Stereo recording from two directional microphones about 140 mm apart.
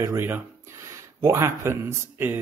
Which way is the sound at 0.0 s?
20° right (ahead or behind).